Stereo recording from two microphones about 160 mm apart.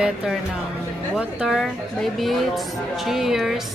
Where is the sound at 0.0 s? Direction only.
5° right (ahead or behind).